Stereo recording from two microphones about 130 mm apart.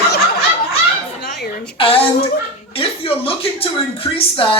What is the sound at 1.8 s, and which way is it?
Speech, 45° left (ahead or behind).